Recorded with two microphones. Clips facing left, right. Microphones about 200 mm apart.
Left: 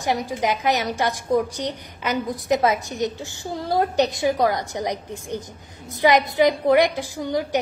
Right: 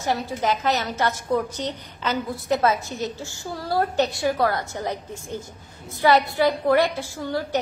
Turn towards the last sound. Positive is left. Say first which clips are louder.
# left 2 dB
turn(degrees=15)  # may be behind; listen again after turning